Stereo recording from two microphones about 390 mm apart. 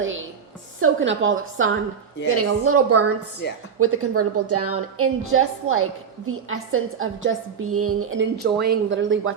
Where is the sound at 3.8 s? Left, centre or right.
Right.